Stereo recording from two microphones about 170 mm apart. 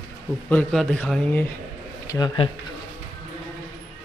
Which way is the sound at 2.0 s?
25° left (ahead or behind).